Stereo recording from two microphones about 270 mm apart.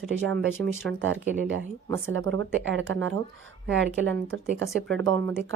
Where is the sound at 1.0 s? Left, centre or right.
Right.